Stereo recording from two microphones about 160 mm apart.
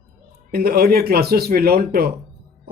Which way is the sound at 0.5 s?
70° right (ahead or behind).